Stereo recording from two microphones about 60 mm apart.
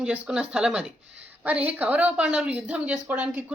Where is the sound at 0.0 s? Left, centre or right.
Centre.